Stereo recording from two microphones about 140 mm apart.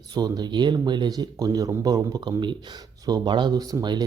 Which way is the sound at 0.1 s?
30° right (ahead or behind).